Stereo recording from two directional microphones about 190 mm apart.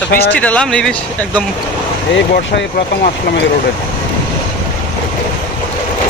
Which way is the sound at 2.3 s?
55° left (ahead or behind).